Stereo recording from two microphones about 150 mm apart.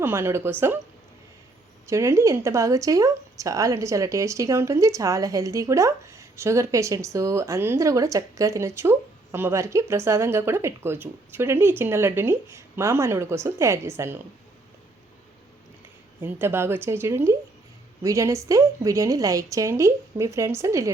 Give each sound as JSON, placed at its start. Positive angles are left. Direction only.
{"t": 0.0, "sound": "a woman's voice", "side_deg": -15}
{"t": 1.9, "sound": "speech", "side_deg": -20}
{"t": 16.2, "sound": "a woman's voice", "side_deg": -15}